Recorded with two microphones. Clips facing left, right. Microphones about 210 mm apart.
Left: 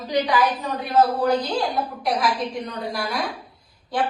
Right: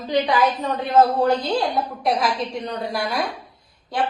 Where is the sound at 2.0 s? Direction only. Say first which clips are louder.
Right 1 dB; 25° right (ahead or behind).